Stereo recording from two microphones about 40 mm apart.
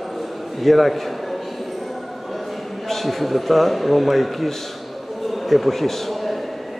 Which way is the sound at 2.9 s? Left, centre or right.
Centre.